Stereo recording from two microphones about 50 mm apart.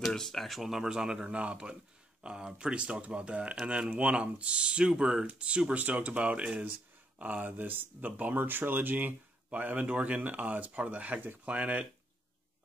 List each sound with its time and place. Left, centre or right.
0.1 s speech: centre; by 11.8 s right